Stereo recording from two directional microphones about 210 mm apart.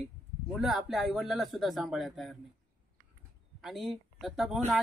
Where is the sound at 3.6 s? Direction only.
Centre (ahead or behind).